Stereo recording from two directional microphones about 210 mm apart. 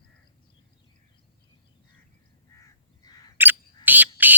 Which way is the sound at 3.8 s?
10° right (ahead or behind).